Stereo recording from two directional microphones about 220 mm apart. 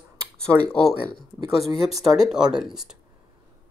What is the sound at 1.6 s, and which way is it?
Speech, centre (ahead or behind).